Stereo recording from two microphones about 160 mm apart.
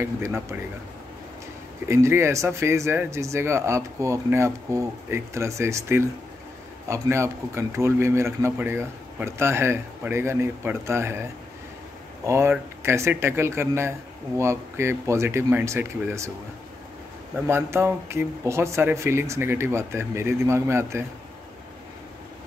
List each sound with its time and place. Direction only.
0.0 s speech: 15° right (ahead or behind)
1.9 s speech: 15° right (ahead or behind)
12.3 s speech: 15° right (ahead or behind)
17.5 s speech: 15° right (ahead or behind)